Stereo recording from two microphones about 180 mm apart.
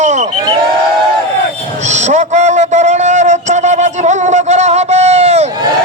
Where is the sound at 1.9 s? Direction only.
40° right (ahead or behind).